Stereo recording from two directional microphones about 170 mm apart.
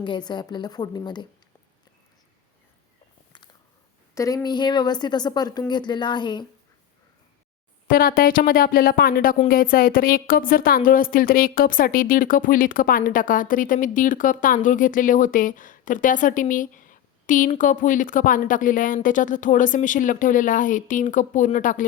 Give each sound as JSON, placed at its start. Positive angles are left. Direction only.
{"t": 0.0, "sound": "speech", "side_deg": 25}
{"t": 4.1, "sound": "speech", "side_deg": 20}
{"t": 7.9, "sound": "speech", "side_deg": 55}